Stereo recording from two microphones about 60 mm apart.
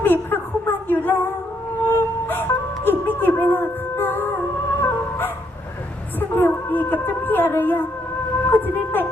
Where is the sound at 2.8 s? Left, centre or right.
Left.